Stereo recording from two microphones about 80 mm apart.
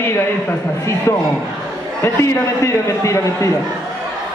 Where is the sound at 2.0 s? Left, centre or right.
Left.